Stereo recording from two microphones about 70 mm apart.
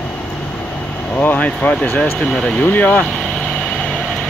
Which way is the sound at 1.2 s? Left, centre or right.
Left.